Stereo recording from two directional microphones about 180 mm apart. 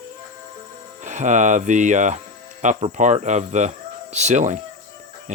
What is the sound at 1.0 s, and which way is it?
Speech, 40° right (ahead or behind).